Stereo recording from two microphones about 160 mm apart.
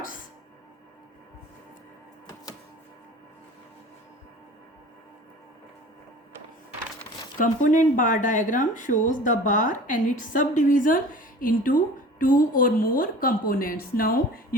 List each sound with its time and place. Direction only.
7.3 s a woman's voice: 55° left (ahead or behind)